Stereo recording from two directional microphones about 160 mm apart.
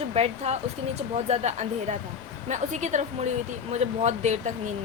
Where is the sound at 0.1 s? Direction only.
40° right (ahead or behind).